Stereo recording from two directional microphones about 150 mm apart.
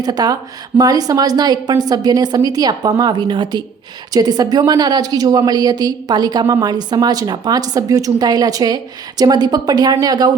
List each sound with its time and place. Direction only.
0.0 s a woman's voice: 25° right (ahead or behind)